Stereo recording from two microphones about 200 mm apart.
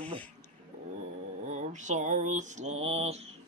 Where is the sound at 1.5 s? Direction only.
35° right (ahead or behind).